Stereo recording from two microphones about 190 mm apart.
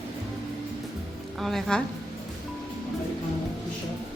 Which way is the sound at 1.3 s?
Centre (ahead or behind).